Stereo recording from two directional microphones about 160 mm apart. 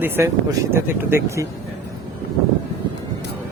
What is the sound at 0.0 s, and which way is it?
Speech, 15° right (ahead or behind).